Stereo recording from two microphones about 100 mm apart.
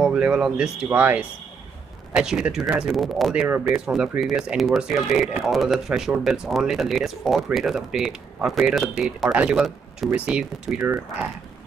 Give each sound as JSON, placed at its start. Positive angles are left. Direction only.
{"t": 0.0, "sound": "speech", "side_deg": -5}
{"t": 9.3, "sound": "speech", "side_deg": -10}